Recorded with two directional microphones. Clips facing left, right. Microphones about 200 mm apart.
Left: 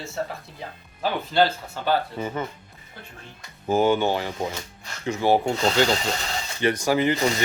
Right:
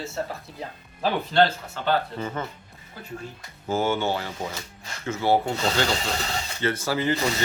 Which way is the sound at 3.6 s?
15° left (ahead or behind).